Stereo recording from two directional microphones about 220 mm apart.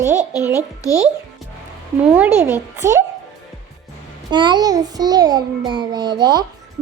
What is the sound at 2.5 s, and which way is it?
Speech, 10° right (ahead or behind).